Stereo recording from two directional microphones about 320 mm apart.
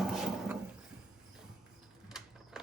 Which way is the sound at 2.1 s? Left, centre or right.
Centre.